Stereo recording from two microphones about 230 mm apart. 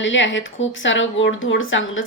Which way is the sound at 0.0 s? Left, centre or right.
Left.